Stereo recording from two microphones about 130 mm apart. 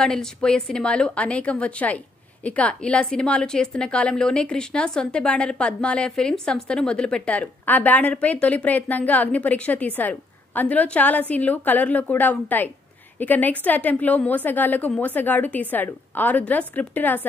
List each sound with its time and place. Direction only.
0.0 s a woman's voice: 5° left (ahead or behind)